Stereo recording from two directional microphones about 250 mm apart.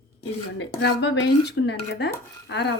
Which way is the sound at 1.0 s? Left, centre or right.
Left.